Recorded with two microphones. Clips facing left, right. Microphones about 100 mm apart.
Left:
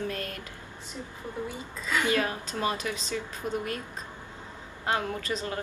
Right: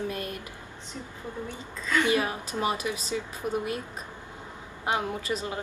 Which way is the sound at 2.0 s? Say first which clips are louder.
Right 2 dB; 15° right (ahead or behind).